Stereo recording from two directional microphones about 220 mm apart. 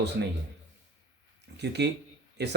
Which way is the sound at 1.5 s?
50° right (ahead or behind).